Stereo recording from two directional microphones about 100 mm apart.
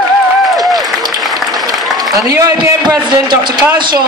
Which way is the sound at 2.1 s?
35° right (ahead or behind).